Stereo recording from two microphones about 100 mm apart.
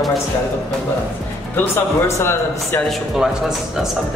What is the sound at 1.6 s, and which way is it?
Speech, 20° left (ahead or behind).